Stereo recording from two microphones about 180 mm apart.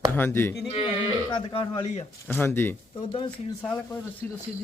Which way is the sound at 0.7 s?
30° left (ahead or behind).